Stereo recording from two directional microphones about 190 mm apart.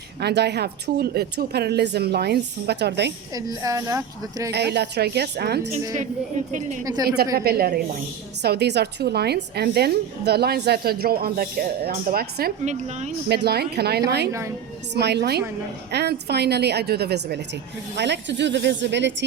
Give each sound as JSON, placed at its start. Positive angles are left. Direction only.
{"t": 0.2, "sound": "a woman's voice", "side_deg": -60}
{"t": 3.3, "sound": "a woman's voice", "side_deg": -20}
{"t": 4.5, "sound": "a woman's voice", "side_deg": -60}
{"t": 6.5, "sound": "a woman's voice", "side_deg": -40}
{"t": 6.8, "sound": "a woman's voice", "side_deg": -20}
{"t": 7.3, "sound": "a woman's voice", "side_deg": -55}
{"t": 12.6, "sound": "a woman's voice", "side_deg": -35}
{"t": 13.2, "sound": "a woman's voice", "side_deg": -55}